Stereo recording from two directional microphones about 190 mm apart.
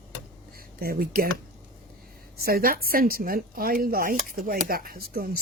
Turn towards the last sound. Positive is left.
turn(degrees=-50)  # may be behind; listen again after turning